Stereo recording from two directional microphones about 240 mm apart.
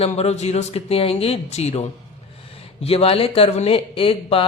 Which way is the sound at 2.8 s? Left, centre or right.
Left.